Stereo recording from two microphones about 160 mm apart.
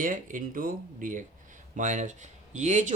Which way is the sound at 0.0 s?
55° right (ahead or behind).